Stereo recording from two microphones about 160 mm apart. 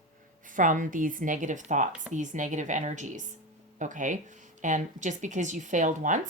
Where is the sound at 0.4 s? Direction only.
55° right (ahead or behind).